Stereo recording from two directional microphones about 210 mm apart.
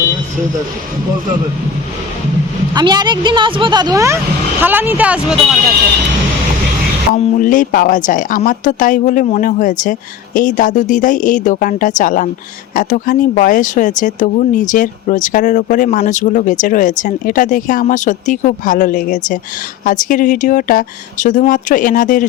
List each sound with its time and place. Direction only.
2.7 s speech: 20° right (ahead or behind); by 5.5 s 5° right (ahead or behind)
7.1 s speech: 35° left (ahead or behind)